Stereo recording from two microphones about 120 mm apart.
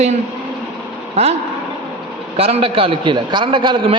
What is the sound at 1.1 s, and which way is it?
Vehicle, 60° right (ahead or behind).